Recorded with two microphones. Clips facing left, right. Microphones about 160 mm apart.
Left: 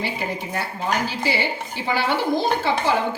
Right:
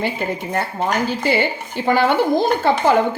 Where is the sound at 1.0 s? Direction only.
50° right (ahead or behind).